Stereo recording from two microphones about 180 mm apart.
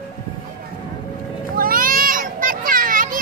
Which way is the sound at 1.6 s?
50° right (ahead or behind).